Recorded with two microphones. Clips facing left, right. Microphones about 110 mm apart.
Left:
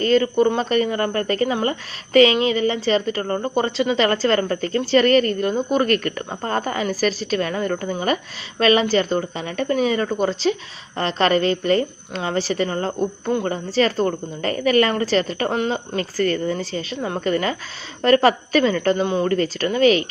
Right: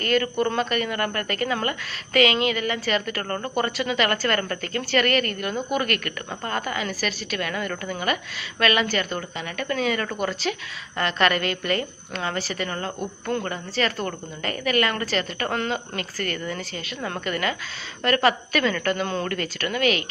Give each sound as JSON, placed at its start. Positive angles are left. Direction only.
{"t": 0.0, "sound": "a woman's voice", "side_deg": 25}
{"t": 0.6, "sound": "a woman's voice", "side_deg": 35}
{"t": 13.7, "sound": "a woman's voice", "side_deg": 35}
{"t": 15.4, "sound": "a woman's voice", "side_deg": 20}
{"t": 19.3, "sound": "a woman's voice", "side_deg": 30}